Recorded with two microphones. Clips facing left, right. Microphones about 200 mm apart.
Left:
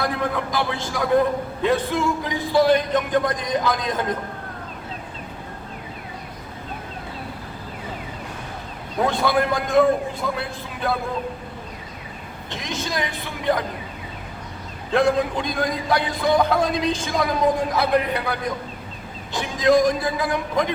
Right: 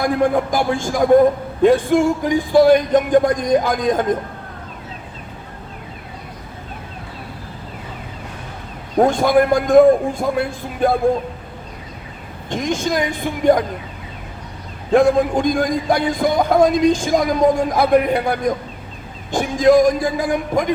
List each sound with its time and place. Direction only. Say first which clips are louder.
0.2 s speech: right 7 dB; 45° right (ahead or behind)
9.0 s speech: right 7 dB; 50° right (ahead or behind)
12.5 s speech: right 9 dB; 50° right (ahead or behind)
14.9 s speech: right 6 dB; 50° right (ahead or behind)